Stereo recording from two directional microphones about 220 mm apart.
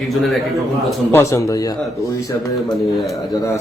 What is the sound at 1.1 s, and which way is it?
Speech, 10° left (ahead or behind).